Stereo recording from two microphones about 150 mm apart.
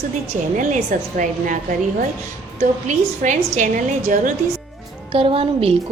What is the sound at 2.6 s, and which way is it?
A woman's voice, 55° right (ahead or behind).